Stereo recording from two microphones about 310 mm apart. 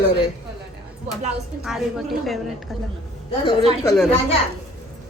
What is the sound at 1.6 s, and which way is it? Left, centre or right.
Speech, centre.